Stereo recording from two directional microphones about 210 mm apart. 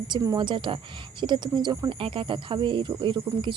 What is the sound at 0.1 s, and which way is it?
Speech, 20° right (ahead or behind).